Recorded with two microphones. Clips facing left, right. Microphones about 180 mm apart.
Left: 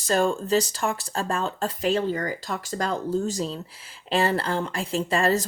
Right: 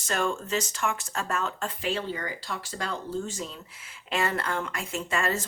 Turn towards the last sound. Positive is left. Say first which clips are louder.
# left 6 dB
turn(degrees=35)  # may be behind; listen again after turning